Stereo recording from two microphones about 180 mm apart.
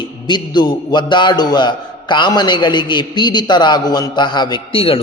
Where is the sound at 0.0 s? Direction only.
25° left (ahead or behind).